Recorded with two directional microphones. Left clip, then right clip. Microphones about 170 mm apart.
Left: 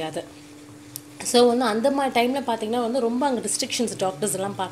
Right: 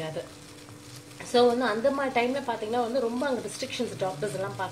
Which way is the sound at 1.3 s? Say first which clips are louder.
Left 4 dB; 45° left (ahead or behind).